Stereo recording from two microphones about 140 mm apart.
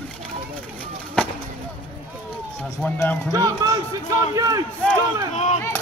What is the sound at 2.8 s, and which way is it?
Speech, 10° left (ahead or behind).